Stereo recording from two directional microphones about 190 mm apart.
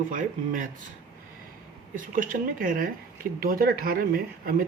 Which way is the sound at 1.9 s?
45° right (ahead or behind).